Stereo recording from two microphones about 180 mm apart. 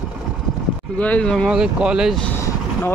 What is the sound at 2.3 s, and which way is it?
Vehicle, 15° left (ahead or behind).